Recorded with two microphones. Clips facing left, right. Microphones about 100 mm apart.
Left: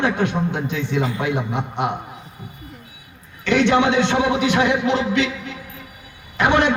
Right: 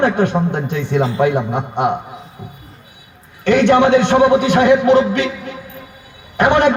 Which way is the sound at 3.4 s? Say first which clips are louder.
Right 5 dB; 50° right (ahead or behind).